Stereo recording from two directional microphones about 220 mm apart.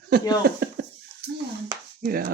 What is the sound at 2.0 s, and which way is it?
Speech, 40° right (ahead or behind).